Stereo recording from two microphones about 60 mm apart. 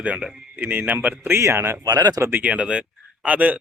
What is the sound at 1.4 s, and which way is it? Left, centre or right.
Speech, right.